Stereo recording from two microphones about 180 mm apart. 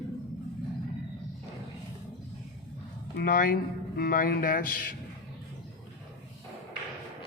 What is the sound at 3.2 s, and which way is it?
Speech, 55° left (ahead or behind).